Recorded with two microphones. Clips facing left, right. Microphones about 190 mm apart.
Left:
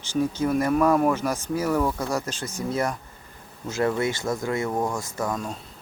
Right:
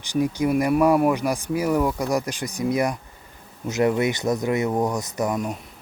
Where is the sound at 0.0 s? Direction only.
15° right (ahead or behind).